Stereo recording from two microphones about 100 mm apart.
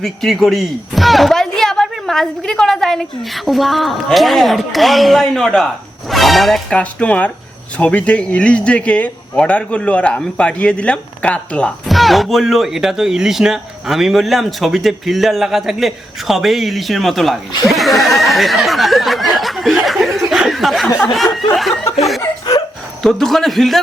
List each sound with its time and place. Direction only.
0.0 s speech: centre (ahead or behind)
6.7 s speech: 15° left (ahead or behind)
11.9 s speech: centre (ahead or behind)
17.7 s a sound: centre (ahead or behind)
21.5 s speech: centre (ahead or behind)
22.2 s speech: 40° left (ahead or behind)
23.0 s speech: 5° left (ahead or behind)